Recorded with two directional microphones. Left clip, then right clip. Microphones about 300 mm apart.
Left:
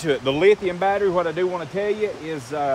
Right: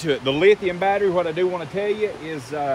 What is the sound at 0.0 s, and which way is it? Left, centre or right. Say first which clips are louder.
Speech: even; centre.